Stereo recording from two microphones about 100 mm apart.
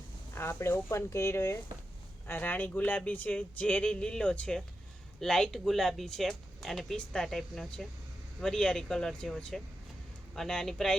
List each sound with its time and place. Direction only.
0.3 s speech: 25° left (ahead or behind); by 10.9 s 5° left (ahead or behind)